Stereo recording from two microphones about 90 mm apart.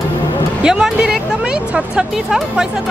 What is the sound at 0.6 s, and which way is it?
Speech, 5° right (ahead or behind).